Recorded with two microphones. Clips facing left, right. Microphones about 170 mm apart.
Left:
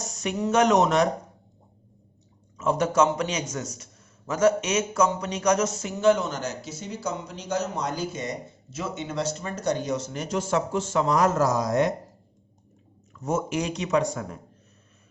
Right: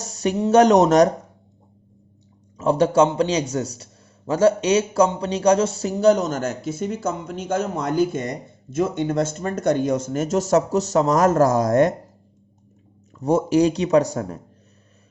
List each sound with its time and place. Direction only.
0.0 s speech: 35° right (ahead or behind)
2.6 s a man's voice: 30° right (ahead or behind); by 11.9 s 50° right (ahead or behind)
13.1 s a man's voice: 35° right (ahead or behind)